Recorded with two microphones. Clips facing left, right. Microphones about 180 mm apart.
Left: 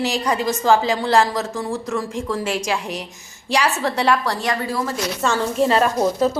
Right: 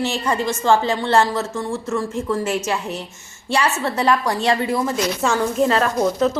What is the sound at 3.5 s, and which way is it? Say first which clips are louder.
Speech: even; centre (ahead or behind).